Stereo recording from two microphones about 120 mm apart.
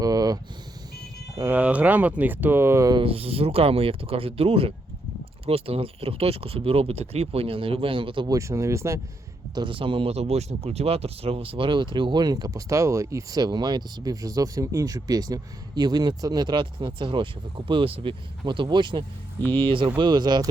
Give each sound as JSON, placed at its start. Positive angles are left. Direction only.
{"t": 0.0, "sound": "vehicle", "side_deg": -30}
{"t": 1.4, "sound": "speech", "side_deg": -15}
{"t": 2.9, "sound": "speech", "side_deg": -50}
{"t": 8.3, "sound": "speech", "side_deg": -25}
{"t": 9.6, "sound": "speech", "side_deg": -45}